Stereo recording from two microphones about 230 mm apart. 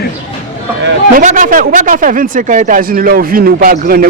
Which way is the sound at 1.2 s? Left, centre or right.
Right.